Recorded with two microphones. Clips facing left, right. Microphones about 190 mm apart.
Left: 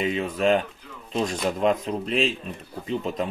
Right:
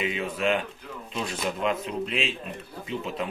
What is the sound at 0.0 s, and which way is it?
Speech, 40° left (ahead or behind).